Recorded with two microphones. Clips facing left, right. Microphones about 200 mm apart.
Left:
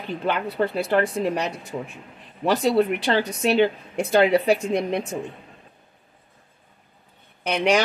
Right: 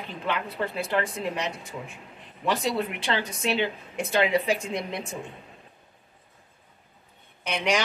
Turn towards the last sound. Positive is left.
turn(degrees=40)  # may be behind; listen again after turning